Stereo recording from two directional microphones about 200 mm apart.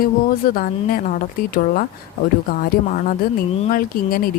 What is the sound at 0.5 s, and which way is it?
Speech, 45° left (ahead or behind).